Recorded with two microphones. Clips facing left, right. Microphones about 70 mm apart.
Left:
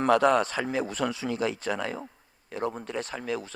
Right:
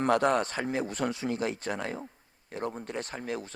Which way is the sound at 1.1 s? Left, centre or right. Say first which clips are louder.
Left 1 dB; right.